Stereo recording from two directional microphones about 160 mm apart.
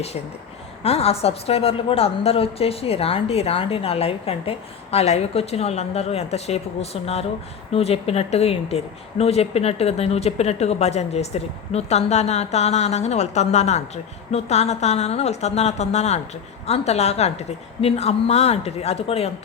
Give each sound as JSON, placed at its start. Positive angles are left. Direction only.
{"t": 0.8, "sound": "a woman's voice", "side_deg": 40}